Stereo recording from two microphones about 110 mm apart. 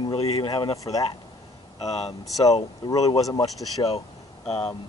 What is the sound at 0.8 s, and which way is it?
Speech, 35° left (ahead or behind).